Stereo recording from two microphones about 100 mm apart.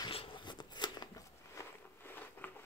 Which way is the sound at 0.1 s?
60° left (ahead or behind).